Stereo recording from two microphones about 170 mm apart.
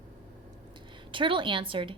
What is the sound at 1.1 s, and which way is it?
Speech, 30° right (ahead or behind).